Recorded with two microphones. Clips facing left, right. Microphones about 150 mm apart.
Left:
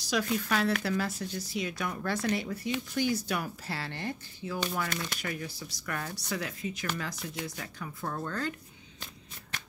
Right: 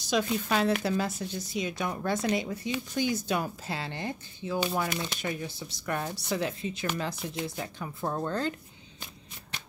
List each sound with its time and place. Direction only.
0.0 s speech: 20° right (ahead or behind)